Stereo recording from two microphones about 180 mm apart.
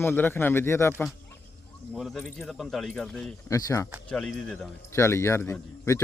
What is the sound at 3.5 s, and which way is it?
Speech, 20° left (ahead or behind).